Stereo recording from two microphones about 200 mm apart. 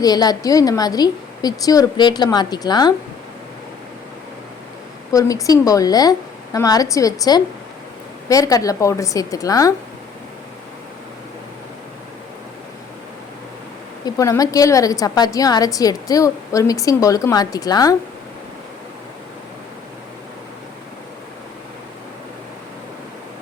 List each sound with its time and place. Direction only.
0.0 s a woman's voice: 20° left (ahead or behind)
5.1 s a woman's voice: 15° left (ahead or behind)
14.0 s a woman's voice: 15° left (ahead or behind)